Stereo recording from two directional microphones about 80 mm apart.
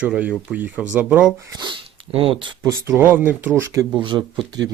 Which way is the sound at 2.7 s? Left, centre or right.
Right.